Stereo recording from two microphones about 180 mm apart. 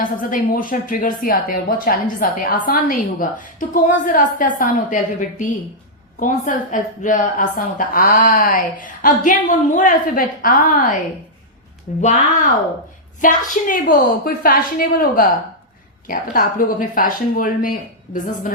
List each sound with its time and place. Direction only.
0.0 s a woman's voice: 50° left (ahead or behind)
13.2 s a woman's voice: 50° left (ahead or behind)